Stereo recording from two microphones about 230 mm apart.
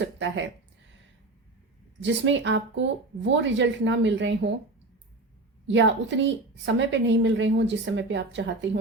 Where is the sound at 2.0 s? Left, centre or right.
Right.